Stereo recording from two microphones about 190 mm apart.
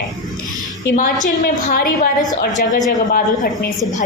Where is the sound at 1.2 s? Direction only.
45° left (ahead or behind).